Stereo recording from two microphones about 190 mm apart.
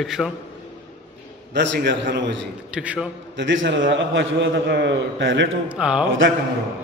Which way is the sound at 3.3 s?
75° right (ahead or behind).